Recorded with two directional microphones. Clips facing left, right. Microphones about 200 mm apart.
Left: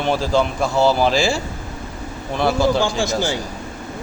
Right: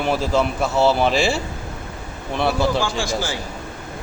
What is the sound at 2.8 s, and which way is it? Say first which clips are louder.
Speech: left 3 dB; 25° left (ahead or behind).